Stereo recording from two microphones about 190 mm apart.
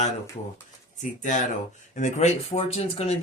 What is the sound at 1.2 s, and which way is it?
Speech, 40° left (ahead or behind).